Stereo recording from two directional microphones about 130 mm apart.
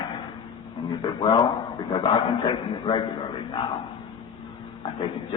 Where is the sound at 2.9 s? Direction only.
35° left (ahead or behind).